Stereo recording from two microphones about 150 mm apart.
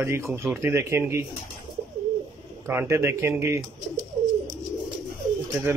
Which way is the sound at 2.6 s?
15° right (ahead or behind).